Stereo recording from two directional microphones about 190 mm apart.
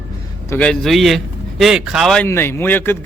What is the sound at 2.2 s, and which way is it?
Speech, 10° left (ahead or behind).